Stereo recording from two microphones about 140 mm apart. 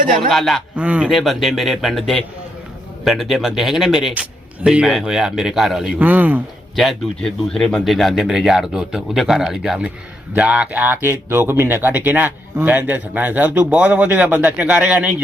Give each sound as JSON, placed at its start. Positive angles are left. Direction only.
{"t": 0.0, "sound": "a man's voice", "side_deg": -75}
{"t": 0.3, "sound": "speech", "side_deg": 0}
{"t": 6.0, "sound": "speech", "side_deg": -10}
{"t": 6.7, "sound": "speech", "side_deg": 0}